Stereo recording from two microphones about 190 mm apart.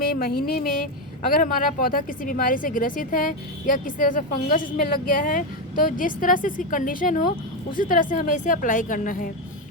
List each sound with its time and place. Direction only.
0.1 s speech: 50° left (ahead or behind)